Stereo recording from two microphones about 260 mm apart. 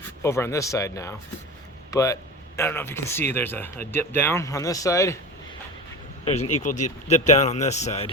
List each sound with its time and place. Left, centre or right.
0.2 s speech: centre
6.6 s speech: left